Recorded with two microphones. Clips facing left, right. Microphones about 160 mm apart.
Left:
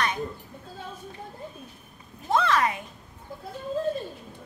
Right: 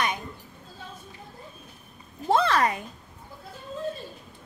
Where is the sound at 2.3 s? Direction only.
35° right (ahead or behind).